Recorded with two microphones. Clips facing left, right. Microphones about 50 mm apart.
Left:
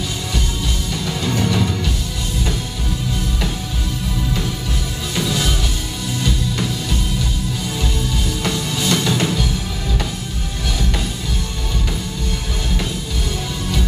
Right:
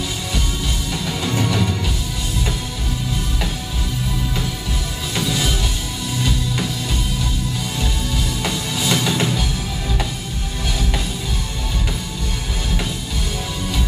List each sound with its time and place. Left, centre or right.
1.0 s music: centre
5.1 s music: centre
8.5 s music: centre